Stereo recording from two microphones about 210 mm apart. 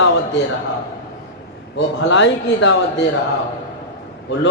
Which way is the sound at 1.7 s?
60° left (ahead or behind).